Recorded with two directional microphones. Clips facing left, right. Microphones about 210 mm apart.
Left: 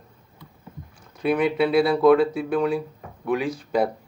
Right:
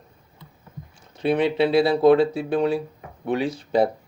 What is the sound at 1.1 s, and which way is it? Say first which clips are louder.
Speech: right 1 dB; 30° right (ahead or behind).